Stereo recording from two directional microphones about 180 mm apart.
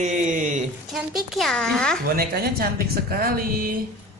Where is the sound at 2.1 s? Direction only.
55° right (ahead or behind).